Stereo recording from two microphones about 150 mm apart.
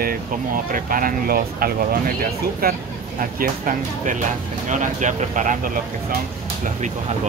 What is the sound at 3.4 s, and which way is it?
Speech, 60° right (ahead or behind).